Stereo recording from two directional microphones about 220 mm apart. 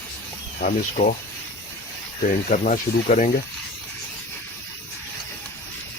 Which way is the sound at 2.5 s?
35° left (ahead or behind).